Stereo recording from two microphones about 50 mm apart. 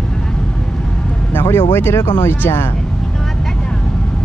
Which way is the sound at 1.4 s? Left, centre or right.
Left.